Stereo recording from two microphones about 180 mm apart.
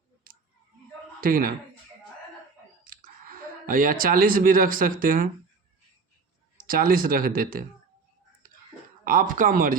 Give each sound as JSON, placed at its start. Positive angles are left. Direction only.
{"t": 1.2, "sound": "speech", "side_deg": -50}
{"t": 2.8, "sound": "speech", "side_deg": -50}
{"t": 6.6, "sound": "speech", "side_deg": -50}
{"t": 9.0, "sound": "speech", "side_deg": -50}